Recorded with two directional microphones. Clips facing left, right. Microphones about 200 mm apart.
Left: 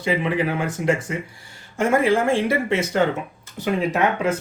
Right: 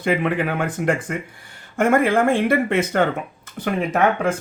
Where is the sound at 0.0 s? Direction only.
55° right (ahead or behind).